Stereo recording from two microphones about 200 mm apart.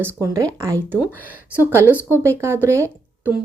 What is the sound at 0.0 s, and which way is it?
Speech, 15° right (ahead or behind).